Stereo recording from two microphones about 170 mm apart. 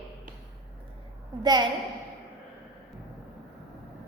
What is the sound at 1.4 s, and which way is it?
Speech, 25° right (ahead or behind).